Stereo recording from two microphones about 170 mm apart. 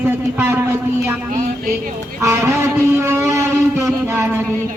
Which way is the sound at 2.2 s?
15° right (ahead or behind).